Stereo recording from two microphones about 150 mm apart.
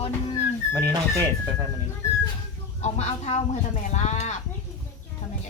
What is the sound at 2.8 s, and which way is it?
Speech, 50° left (ahead or behind).